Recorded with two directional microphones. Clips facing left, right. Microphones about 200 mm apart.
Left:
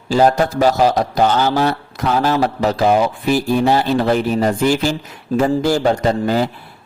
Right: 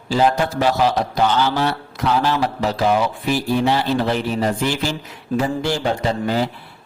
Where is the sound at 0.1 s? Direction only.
45° left (ahead or behind).